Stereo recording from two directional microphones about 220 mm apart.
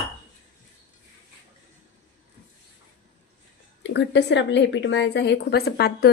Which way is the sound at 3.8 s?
50° left (ahead or behind).